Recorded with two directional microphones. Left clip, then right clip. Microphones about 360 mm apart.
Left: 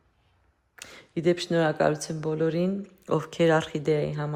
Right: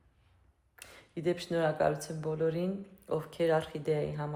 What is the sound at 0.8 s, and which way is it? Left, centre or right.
Speech, left.